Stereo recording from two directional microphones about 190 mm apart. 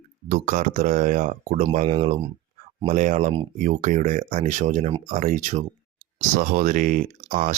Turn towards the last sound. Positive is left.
turn(degrees=-35)  # may be behind; listen again after turning